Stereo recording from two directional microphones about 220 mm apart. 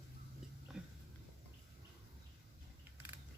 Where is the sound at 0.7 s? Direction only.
5° right (ahead or behind).